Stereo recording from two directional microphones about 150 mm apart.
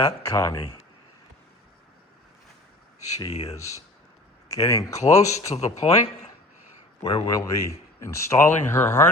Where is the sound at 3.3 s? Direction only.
45° left (ahead or behind).